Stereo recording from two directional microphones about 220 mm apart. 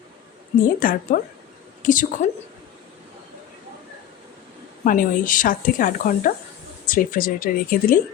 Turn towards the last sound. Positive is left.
turn(degrees=40)  # may be behind; listen again after turning